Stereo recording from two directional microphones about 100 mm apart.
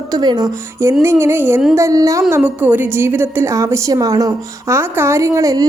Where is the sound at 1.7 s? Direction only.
35° right (ahead or behind).